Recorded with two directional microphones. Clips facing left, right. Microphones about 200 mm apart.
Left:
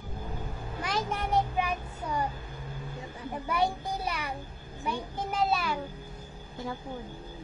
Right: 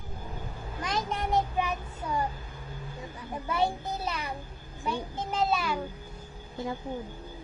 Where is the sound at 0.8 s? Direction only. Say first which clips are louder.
Right 1 dB; 10° left (ahead or behind).